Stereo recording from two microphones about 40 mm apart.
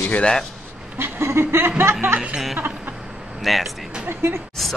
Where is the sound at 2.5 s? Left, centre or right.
Right.